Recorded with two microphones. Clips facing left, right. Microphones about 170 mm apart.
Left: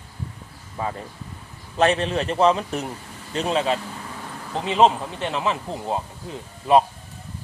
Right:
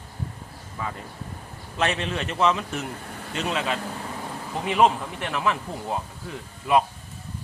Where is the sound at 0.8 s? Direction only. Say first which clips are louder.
Left 4 dB; 30° left (ahead or behind).